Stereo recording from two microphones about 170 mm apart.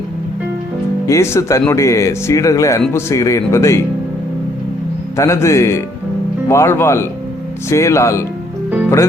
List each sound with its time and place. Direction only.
1.0 s speech: 15° left (ahead or behind)
5.1 s speech: 15° left (ahead or behind)